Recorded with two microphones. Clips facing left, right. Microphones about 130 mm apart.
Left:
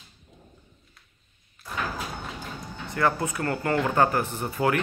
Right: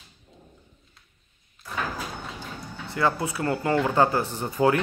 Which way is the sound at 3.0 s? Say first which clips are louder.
Even; 20° right (ahead or behind).